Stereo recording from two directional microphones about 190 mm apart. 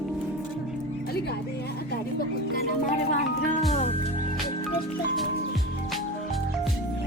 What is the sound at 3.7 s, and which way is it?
Music, 35° left (ahead or behind).